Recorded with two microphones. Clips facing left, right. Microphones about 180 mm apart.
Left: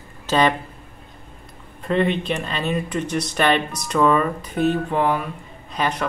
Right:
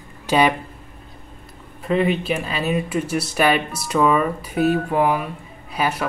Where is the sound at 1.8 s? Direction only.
5° right (ahead or behind).